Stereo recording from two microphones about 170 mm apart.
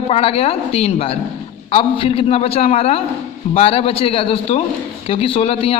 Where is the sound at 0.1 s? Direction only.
35° left (ahead or behind).